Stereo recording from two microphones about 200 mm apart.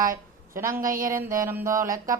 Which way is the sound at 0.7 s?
45° right (ahead or behind).